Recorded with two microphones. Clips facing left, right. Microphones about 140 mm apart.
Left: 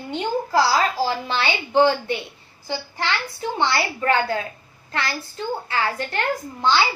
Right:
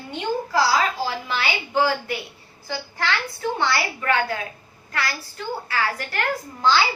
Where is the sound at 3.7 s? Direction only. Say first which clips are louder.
Left 2 dB; 30° left (ahead or behind).